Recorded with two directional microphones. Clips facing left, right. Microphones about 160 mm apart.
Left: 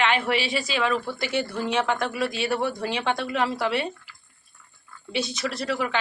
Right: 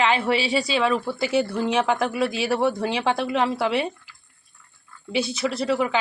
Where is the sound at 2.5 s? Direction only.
25° right (ahead or behind).